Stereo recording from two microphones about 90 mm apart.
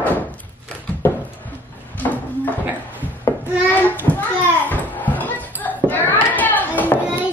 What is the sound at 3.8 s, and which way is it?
Children playing, 20° left (ahead or behind).